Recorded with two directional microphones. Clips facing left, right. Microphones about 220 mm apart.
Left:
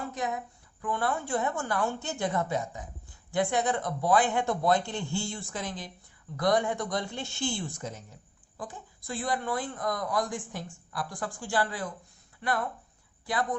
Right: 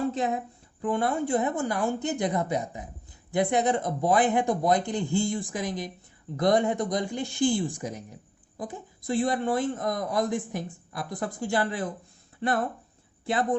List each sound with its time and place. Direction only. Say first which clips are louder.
0.1 s a woman's voice: right 5 dB; 25° right (ahead or behind)